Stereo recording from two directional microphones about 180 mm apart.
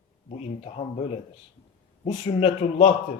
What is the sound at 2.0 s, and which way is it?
Speech, 35° left (ahead or behind).